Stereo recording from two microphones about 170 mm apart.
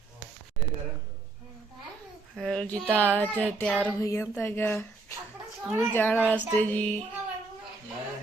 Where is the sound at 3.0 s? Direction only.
10° left (ahead or behind).